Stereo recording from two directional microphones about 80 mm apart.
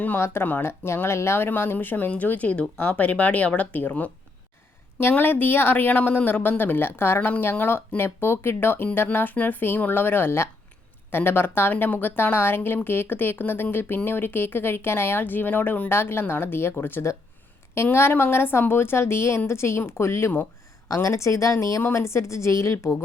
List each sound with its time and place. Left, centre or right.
0.2 s a woman's voice: left
21.8 s a woman's voice: left